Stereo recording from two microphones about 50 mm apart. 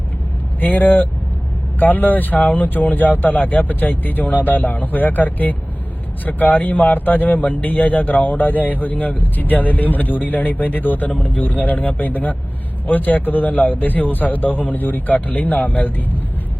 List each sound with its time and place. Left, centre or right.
0.6 s speech: left